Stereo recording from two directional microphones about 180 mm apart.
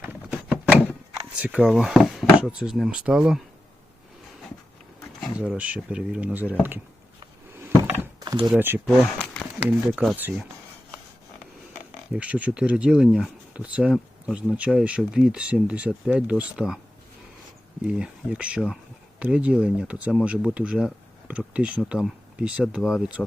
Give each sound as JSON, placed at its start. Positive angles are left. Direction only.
{"t": 0.0, "sound": "a sound", "side_deg": -10}
{"t": 1.4, "sound": "speech", "side_deg": -5}
{"t": 5.2, "sound": "speech", "side_deg": -5}
{"t": 7.5, "sound": "door", "side_deg": -15}
{"t": 8.5, "sound": "speech", "side_deg": -10}
{"t": 8.9, "sound": "a sound", "side_deg": 5}
{"t": 9.6, "sound": "speech", "side_deg": -5}
{"t": 12.1, "sound": "speech", "side_deg": -5}
{"t": 17.8, "sound": "speech", "side_deg": -5}